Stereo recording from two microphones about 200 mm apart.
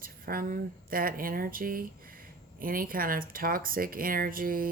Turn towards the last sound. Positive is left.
turn(degrees=-45)  # may be behind; listen again after turning